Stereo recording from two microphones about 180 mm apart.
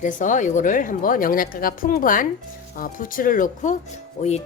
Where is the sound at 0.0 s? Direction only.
45° left (ahead or behind).